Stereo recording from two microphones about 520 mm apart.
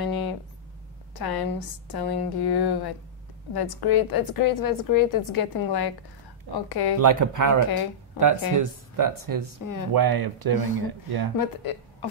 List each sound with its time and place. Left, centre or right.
0.0 s a sound: left
1.1 s a woman's voice: left
7.0 s speech: right
11.3 s speech: left